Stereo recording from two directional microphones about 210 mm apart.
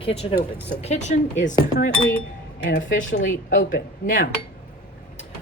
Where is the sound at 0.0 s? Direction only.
30° left (ahead or behind).